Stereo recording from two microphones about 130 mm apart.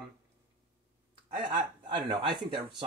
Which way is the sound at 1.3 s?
35° right (ahead or behind).